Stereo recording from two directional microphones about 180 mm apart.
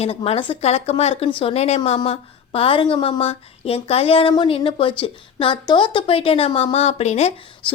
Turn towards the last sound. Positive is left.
turn(degrees=25)  # may be behind; listen again after turning